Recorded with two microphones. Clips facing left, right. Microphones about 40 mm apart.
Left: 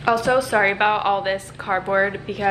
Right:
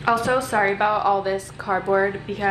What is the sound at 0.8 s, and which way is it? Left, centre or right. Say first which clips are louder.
Speech: left 1 dB; left.